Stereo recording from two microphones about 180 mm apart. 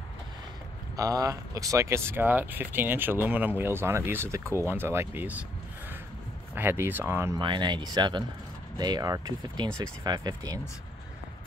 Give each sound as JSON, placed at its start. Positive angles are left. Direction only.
{"t": 0.9, "sound": "speech", "side_deg": -20}
{"t": 6.5, "sound": "speech", "side_deg": -10}
{"t": 7.3, "sound": "speech", "side_deg": -25}